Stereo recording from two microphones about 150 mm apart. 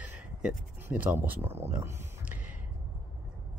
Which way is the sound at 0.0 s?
10° right (ahead or behind).